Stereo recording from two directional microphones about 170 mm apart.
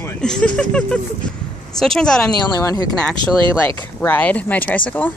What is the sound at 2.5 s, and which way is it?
Speech, 20° left (ahead or behind).